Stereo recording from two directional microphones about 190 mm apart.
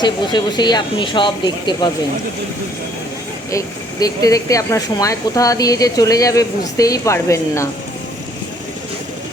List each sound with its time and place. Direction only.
0.0 s speech: 25° left (ahead or behind)
4.0 s a woman's voice: 20° left (ahead or behind)